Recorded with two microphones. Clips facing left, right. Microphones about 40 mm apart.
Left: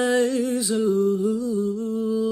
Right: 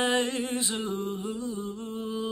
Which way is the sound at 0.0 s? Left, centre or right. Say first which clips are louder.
Left 6 dB; right.